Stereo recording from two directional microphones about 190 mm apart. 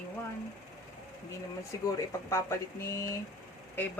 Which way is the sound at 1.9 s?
15° left (ahead or behind).